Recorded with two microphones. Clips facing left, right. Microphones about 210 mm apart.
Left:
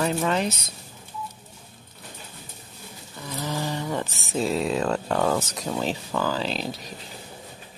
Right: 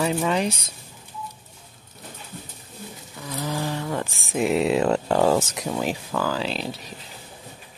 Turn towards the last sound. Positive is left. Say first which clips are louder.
# even
turn(degrees=-5)  # may be behind; listen again after turning